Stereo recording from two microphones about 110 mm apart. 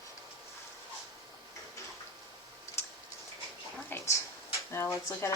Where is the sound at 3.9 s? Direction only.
20° left (ahead or behind).